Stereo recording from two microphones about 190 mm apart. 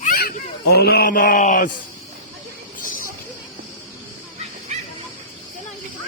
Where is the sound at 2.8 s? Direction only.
45° left (ahead or behind).